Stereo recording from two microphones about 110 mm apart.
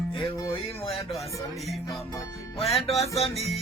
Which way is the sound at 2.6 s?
Centre (ahead or behind).